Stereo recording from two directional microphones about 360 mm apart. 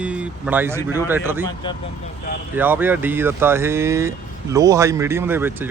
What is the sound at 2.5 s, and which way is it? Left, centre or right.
Speech, centre.